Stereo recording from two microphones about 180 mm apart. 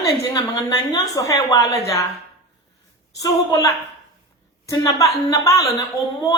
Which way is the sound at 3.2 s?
20° left (ahead or behind).